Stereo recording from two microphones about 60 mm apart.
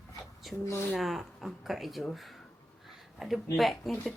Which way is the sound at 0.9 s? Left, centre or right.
Centre.